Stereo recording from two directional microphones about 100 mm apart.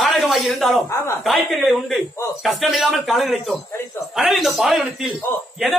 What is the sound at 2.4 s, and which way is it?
A man's voice, centre (ahead or behind).